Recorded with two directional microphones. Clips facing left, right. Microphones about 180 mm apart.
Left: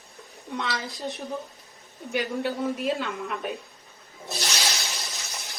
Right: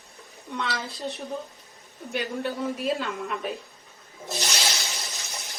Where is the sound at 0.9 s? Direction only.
15° left (ahead or behind).